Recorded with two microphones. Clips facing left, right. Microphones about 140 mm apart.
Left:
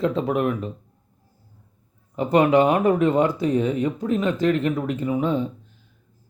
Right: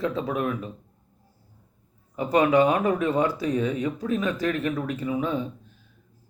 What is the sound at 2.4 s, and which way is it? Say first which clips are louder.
Speech: left 2 dB; 25° left (ahead or behind).